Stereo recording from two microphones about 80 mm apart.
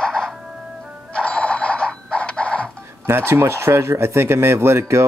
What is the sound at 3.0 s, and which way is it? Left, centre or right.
Speech, right.